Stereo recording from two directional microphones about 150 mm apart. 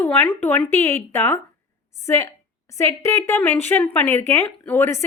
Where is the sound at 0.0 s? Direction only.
10° left (ahead or behind).